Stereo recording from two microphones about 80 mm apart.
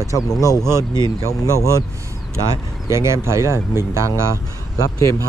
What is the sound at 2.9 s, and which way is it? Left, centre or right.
Speech, right.